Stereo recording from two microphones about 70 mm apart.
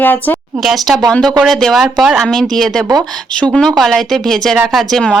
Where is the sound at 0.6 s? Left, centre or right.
Centre.